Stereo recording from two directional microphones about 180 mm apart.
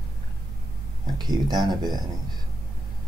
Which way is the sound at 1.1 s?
25° right (ahead or behind).